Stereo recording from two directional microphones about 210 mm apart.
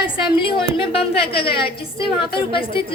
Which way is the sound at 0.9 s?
25° left (ahead or behind).